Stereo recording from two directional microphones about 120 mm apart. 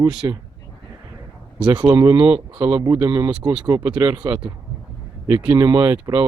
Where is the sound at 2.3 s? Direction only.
15° right (ahead or behind).